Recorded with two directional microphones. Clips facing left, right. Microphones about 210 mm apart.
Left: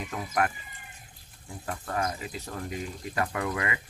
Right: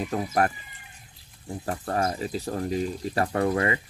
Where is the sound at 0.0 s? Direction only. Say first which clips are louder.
Right 5 dB; 40° right (ahead or behind).